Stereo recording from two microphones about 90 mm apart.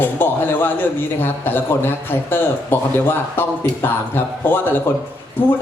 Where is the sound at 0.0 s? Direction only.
25° left (ahead or behind).